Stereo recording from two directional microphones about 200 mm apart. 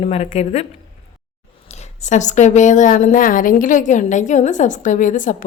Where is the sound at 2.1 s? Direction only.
35° left (ahead or behind).